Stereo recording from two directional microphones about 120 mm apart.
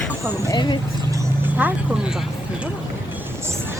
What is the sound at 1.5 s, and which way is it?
Speech, 15° right (ahead or behind).